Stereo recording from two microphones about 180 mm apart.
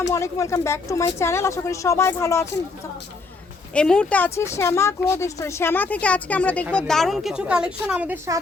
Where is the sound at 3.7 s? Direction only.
5° left (ahead or behind).